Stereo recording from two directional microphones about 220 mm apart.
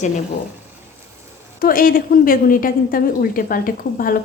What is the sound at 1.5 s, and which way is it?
A woman's voice, 40° left (ahead or behind).